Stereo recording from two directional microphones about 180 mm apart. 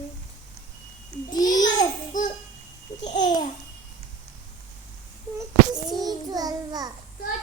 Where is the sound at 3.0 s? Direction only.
45° left (ahead or behind).